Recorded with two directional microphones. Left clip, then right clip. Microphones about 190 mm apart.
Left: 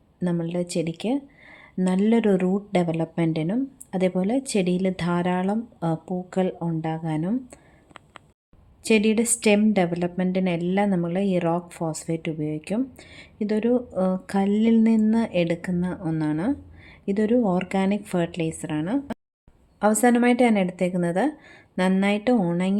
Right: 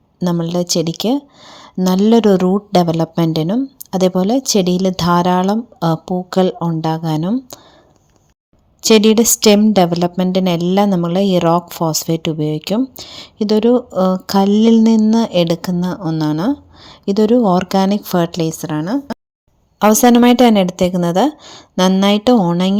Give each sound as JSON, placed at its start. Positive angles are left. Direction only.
{"t": 0.2, "sound": "speech", "side_deg": -30}
{"t": 8.8, "sound": "speech", "side_deg": -35}